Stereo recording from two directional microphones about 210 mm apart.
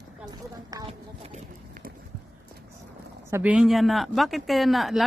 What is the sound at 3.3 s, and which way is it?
Speech, 10° right (ahead or behind).